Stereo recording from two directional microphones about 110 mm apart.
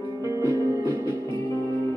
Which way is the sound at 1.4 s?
25° left (ahead or behind).